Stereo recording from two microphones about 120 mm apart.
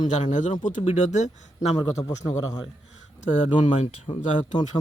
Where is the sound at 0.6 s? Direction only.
80° left.